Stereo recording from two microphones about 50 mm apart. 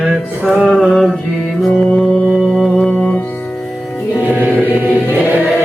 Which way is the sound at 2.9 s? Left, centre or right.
Left.